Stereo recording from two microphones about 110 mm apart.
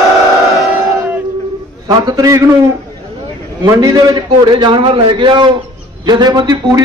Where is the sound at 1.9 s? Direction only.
35° right (ahead or behind).